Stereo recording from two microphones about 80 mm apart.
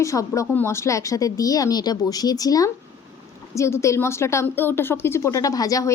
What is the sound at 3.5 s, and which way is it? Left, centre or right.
A woman's voice, left.